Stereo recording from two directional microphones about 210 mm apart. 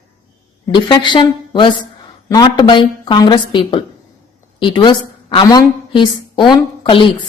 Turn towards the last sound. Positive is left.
turn(degrees=20)  # may be behind; listen again after turning